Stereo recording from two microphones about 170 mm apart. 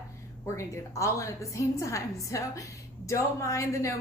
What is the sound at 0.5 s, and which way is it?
A woman's voice, 15° left (ahead or behind).